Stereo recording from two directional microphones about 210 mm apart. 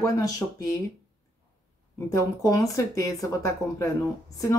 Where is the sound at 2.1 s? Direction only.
15° left (ahead or behind).